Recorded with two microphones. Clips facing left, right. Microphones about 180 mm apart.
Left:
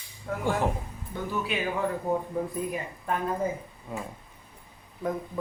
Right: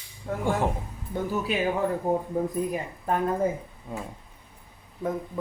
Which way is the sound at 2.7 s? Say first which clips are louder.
Right 3 dB; 40° right (ahead or behind).